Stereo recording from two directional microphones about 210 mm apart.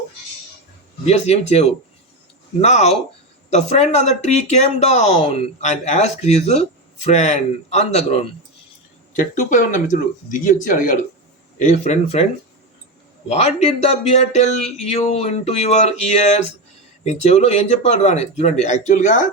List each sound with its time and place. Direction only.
1.0 s speech: 30° left (ahead or behind)
13.2 s speech: 30° left (ahead or behind)
17.0 s speech: 35° left (ahead or behind)